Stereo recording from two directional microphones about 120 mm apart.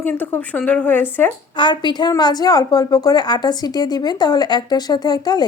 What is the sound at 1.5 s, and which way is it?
A woman's voice, 40° left (ahead or behind).